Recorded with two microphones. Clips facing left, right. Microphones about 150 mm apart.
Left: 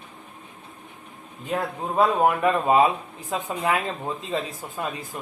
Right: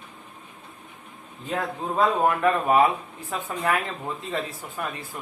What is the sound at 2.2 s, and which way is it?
Speech, 20° left (ahead or behind).